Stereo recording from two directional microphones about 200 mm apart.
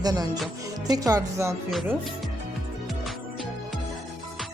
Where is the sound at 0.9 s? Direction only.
15° right (ahead or behind).